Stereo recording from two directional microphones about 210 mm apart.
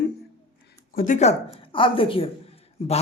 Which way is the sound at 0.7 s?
40° left (ahead or behind).